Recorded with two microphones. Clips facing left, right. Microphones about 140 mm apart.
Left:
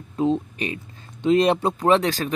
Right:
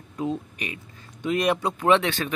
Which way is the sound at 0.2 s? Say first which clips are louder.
Left 7 dB; 30° left (ahead or behind).